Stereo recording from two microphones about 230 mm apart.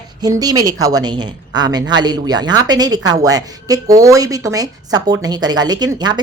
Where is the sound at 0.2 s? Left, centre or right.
Centre.